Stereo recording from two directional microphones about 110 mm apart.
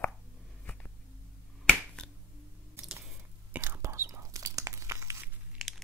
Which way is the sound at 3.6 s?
25° right (ahead or behind).